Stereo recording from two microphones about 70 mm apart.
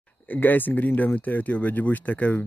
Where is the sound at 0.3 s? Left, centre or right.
Left.